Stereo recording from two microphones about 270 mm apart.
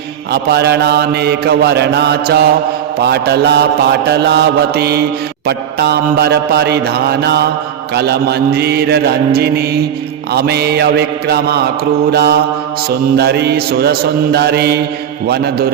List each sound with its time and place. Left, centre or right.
0.5 s mantra: right